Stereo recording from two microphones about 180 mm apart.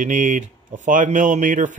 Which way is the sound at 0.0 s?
45° right (ahead or behind).